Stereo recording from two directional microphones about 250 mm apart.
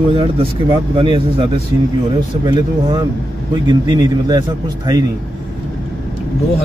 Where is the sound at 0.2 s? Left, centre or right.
Right.